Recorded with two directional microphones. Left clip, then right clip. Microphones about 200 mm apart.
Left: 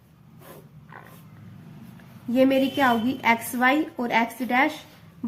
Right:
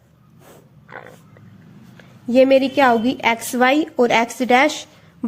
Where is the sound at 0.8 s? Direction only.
45° right (ahead or behind).